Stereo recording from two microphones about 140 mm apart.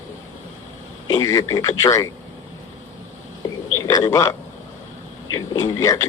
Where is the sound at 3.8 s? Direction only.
20° left (ahead or behind).